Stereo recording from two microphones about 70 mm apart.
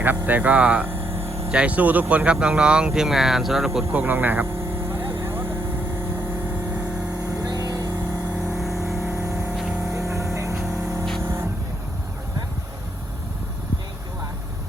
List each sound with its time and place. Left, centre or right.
0.0 s speech: right
1.5 s speech: centre
3.9 s vehicle: right
7.3 s vehicle: right
7.9 s vehicle: right
8.4 s vehicle: centre
9.9 s vehicle: right
10.5 s music: centre
10.8 s vehicle: right